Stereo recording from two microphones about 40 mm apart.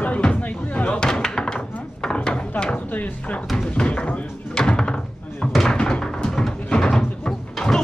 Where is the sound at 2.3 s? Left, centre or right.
Left.